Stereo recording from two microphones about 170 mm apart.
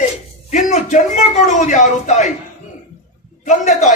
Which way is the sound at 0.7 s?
45° left (ahead or behind).